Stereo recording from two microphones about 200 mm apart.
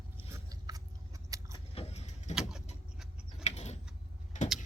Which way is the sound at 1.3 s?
15° right (ahead or behind).